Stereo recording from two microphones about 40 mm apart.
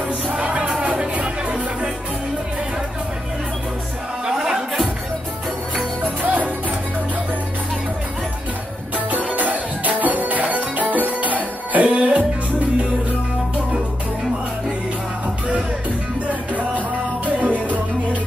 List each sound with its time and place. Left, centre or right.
0.3 s music: right
4.3 s music: centre
6.2 s music: right
8.9 s music: right
16.3 s music: right